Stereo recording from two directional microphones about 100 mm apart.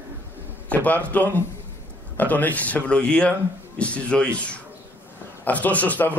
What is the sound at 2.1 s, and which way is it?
Speech, 15° left (ahead or behind).